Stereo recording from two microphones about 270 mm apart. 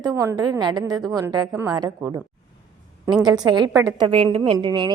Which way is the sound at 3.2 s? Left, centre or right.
Centre.